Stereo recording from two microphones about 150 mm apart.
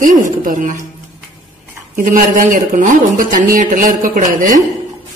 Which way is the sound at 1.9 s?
60° right (ahead or behind).